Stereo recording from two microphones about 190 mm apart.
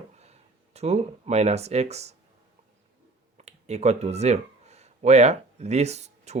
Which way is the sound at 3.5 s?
35° right (ahead or behind).